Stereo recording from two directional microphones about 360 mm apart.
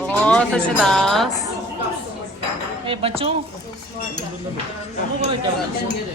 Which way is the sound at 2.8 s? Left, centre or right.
Centre.